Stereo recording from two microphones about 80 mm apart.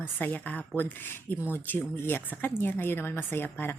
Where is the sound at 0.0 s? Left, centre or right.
Left.